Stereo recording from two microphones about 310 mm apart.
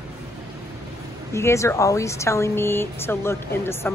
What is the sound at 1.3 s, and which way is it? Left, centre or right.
Speech, centre.